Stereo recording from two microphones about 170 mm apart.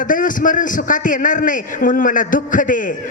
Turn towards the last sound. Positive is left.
turn(degrees=50)  # may be behind; listen again after turning